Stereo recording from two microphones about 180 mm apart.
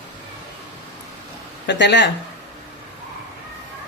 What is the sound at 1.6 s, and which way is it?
Speech, 75° left (ahead or behind).